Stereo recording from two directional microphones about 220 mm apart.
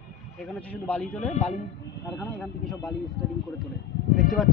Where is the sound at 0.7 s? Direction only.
5° left (ahead or behind).